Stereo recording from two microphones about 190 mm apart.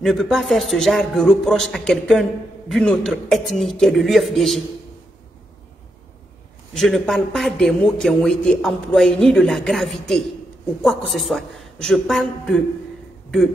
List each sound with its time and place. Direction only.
0.0 s a man's voice: centre (ahead or behind)
6.7 s a man's voice: centre (ahead or behind)